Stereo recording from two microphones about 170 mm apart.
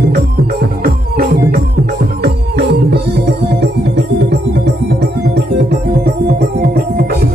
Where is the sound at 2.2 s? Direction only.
75° right (ahead or behind).